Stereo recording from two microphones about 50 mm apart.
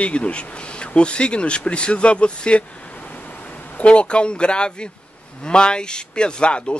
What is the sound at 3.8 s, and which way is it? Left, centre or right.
Speech, left.